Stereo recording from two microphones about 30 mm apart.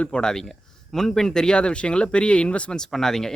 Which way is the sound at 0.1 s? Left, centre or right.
Left.